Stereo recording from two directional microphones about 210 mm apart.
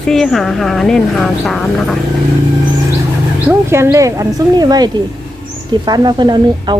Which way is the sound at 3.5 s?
10° right (ahead or behind).